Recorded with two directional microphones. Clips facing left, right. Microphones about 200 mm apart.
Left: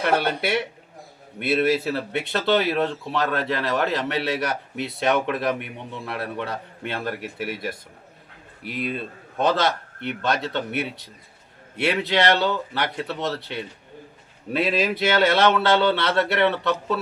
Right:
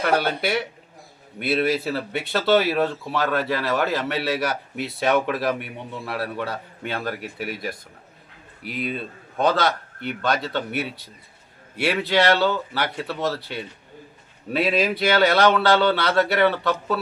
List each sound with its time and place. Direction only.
0.0 s a man's voice: centre (ahead or behind)
12.5 s a man's voice: 5° right (ahead or behind)
13.1 s speech: 20° left (ahead or behind)
14.5 s a man's voice: centre (ahead or behind)